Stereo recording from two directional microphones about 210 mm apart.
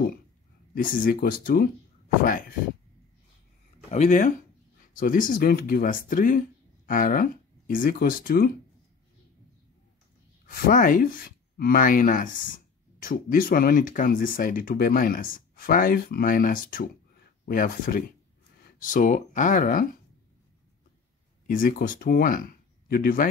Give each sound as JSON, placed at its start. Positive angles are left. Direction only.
{"t": 0.7, "sound": "speech", "side_deg": 40}
{"t": 3.9, "sound": "speech", "side_deg": 35}
{"t": 10.4, "sound": "speech", "side_deg": 40}
{"t": 21.5, "sound": "speech", "side_deg": 40}